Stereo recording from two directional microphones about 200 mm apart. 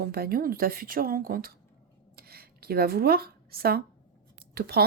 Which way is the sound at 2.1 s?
50° right (ahead or behind).